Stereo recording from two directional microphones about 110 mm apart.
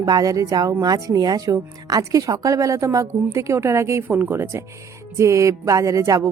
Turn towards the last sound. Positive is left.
turn(degrees=-30)  # may be behind; listen again after turning